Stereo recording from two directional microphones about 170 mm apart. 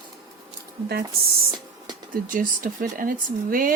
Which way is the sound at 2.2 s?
55° right (ahead or behind).